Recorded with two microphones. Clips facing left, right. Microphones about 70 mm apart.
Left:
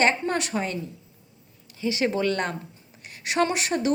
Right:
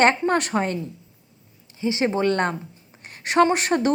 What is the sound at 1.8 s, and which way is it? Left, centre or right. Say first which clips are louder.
Speech: right 3 dB; right.